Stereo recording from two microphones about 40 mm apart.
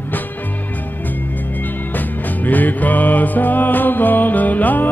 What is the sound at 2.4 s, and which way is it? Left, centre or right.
Music, left.